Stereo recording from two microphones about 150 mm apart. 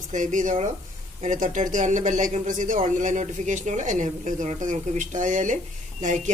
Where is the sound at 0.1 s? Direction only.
55° right (ahead or behind).